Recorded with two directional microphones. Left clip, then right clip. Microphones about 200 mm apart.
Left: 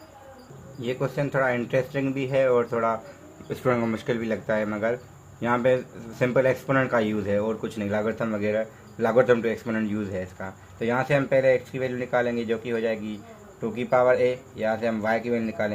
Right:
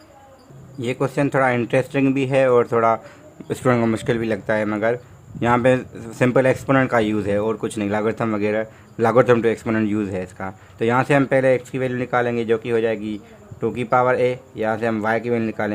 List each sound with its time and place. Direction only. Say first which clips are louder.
0.8 s a man's voice: right 6 dB; 45° right (ahead or behind)